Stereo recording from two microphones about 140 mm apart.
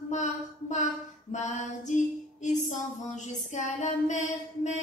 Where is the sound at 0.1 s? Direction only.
60° left (ahead or behind).